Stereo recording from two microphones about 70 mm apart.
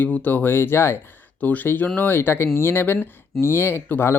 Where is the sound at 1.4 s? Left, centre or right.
Left.